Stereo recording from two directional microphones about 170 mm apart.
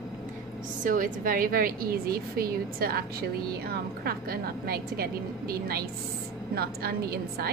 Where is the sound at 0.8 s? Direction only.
50° right (ahead or behind).